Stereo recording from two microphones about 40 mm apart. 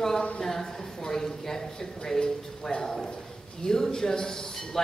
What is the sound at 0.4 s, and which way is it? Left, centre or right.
A man's voice, centre.